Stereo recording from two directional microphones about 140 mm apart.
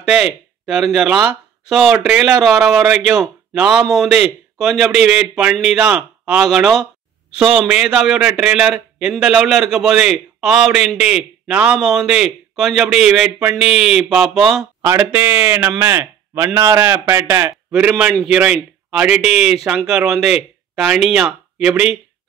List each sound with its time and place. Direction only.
0.0 s a man's voice: 5° right (ahead or behind)
14.8 s a man's voice: 15° right (ahead or behind)
17.7 s a man's voice: 10° right (ahead or behind)